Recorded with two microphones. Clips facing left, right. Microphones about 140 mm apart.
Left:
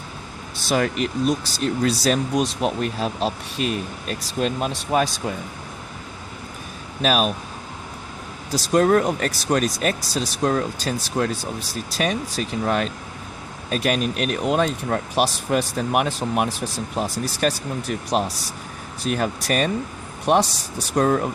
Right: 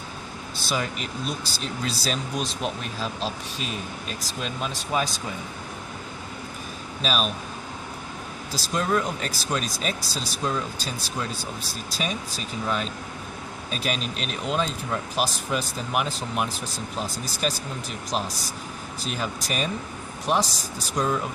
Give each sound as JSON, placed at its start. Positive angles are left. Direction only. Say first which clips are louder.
{"t": 0.7, "sound": "speech", "louder": "left 8 dB", "side_deg": 60}
{"t": 7.0, "sound": "speech", "louder": "left 6 dB", "side_deg": 60}
{"t": 8.5, "sound": "speech", "louder": "left 8 dB", "side_deg": 50}